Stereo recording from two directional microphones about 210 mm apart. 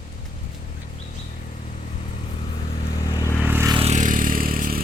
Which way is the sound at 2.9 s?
15° left (ahead or behind).